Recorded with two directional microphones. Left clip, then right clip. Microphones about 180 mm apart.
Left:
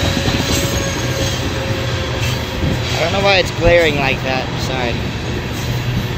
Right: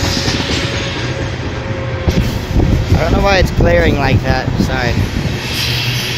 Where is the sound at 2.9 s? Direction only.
15° right (ahead or behind).